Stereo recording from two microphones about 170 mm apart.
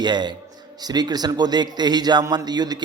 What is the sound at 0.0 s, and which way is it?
A man's voice, 25° right (ahead or behind).